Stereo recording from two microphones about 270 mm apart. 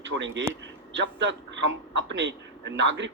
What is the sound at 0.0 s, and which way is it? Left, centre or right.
A man's voice, right.